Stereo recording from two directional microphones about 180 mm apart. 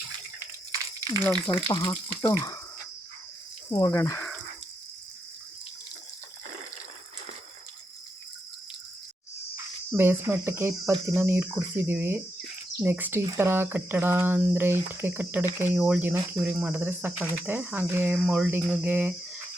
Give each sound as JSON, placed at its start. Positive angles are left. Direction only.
{"t": 1.5, "sound": "speech", "side_deg": 20}
{"t": 3.7, "sound": "speech", "side_deg": 20}
{"t": 9.6, "sound": "speech", "side_deg": -15}
{"t": 11.0, "sound": "cricket", "side_deg": -15}